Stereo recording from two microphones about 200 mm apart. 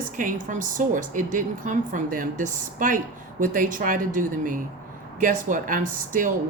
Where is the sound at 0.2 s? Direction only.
40° right (ahead or behind).